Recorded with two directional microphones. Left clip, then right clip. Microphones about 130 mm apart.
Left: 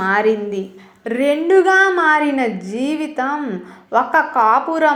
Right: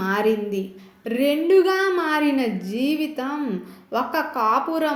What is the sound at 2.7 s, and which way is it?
Speech, 25° left (ahead or behind).